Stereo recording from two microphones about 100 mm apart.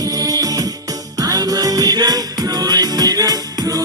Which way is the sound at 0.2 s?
40° right (ahead or behind).